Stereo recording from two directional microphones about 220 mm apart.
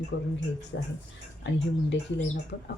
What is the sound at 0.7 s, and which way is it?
Speech, 50° left (ahead or behind).